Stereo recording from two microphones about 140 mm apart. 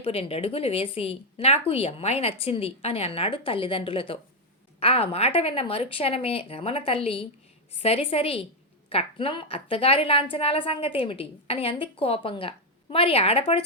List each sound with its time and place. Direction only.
0.0 s a woman's voice: 45° left (ahead or behind)